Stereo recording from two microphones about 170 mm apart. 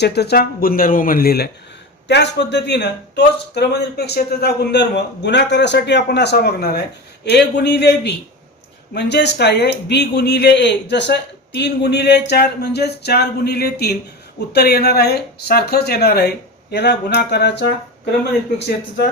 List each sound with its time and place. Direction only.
0.0 s speech: 70° left (ahead or behind)
2.0 s a man's voice: 85° left
7.3 s a man's voice: 85° left